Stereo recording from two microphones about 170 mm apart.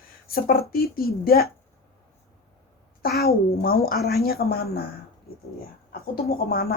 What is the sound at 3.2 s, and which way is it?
A woman's voice, 65° left (ahead or behind).